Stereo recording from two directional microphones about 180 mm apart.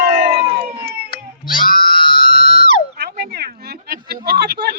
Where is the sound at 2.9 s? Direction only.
60° right (ahead or behind).